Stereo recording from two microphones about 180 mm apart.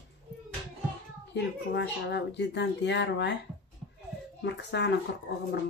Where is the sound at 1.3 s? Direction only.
70° left (ahead or behind).